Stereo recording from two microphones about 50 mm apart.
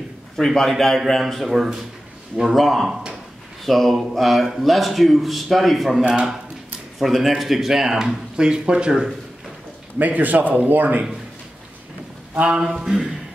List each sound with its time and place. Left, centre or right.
0.4 s a man's voice: centre
9.9 s a man's voice: right
12.5 s speech: centre